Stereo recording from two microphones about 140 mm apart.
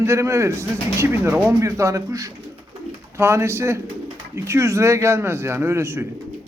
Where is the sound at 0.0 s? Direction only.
20° right (ahead or behind).